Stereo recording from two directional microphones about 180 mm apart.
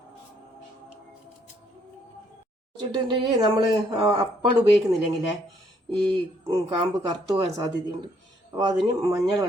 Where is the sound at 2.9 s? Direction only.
25° right (ahead or behind).